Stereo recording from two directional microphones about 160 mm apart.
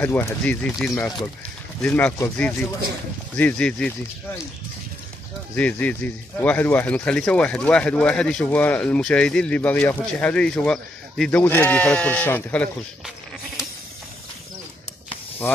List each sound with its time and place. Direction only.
0.0 s speech: 15° left (ahead or behind)
5.6 s speech: 10° left (ahead or behind)